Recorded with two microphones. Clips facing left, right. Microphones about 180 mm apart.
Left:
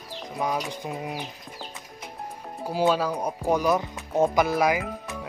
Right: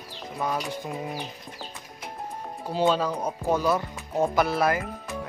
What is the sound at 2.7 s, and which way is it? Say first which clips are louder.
Speech: even; 10° left (ahead or behind).